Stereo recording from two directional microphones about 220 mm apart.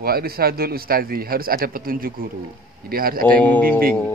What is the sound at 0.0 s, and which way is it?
A man's voice, 45° right (ahead or behind).